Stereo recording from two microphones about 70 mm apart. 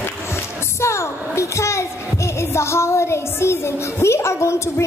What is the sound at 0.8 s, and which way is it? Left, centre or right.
A woman's voice, left.